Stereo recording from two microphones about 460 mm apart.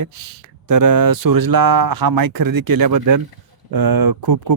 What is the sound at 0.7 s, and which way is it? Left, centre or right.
Speech, right.